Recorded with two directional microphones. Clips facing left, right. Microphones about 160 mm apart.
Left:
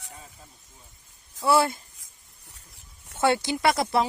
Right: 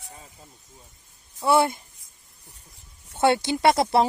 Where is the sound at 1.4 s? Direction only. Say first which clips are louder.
Right 1 dB; 20° right (ahead or behind).